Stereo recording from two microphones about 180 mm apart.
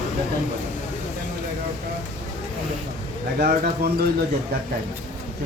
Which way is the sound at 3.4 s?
55° right (ahead or behind).